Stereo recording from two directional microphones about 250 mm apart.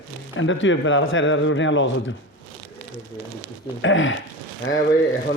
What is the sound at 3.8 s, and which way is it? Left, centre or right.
Speech, left.